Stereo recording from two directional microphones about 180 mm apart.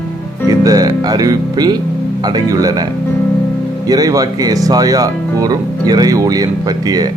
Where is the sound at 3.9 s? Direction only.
20° right (ahead or behind).